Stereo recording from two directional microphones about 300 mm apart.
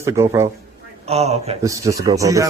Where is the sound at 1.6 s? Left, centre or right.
Centre.